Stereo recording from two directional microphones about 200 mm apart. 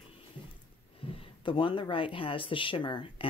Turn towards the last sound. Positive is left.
turn(degrees=25)  # may be behind; listen again after turning